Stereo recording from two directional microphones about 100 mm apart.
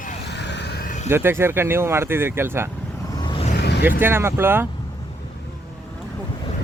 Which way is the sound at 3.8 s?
20° right (ahead or behind).